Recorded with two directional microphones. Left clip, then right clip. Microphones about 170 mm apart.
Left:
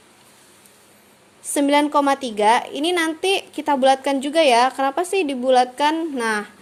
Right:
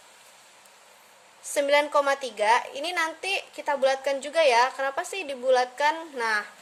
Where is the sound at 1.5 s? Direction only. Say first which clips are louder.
Left 4 dB; 25° left (ahead or behind).